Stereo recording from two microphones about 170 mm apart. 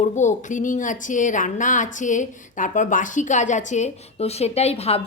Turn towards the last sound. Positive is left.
turn(degrees=40)  # may be behind; listen again after turning